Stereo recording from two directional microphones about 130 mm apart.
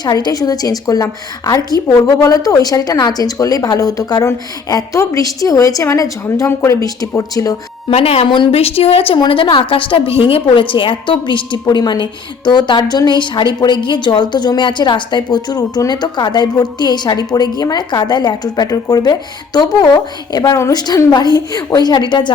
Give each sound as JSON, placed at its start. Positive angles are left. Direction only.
{"t": 0.0, "sound": "a woman's voice", "side_deg": 30}
{"t": 7.9, "sound": "a woman's voice", "side_deg": 50}